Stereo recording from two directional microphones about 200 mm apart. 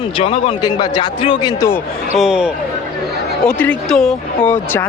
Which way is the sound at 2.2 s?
5° right (ahead or behind).